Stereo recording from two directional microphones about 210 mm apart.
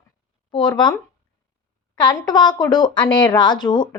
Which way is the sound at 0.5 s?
20° left (ahead or behind).